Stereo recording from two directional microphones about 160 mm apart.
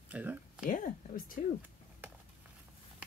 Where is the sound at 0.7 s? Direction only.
60° left (ahead or behind).